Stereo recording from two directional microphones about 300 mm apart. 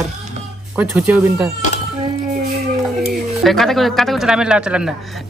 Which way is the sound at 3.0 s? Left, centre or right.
Centre.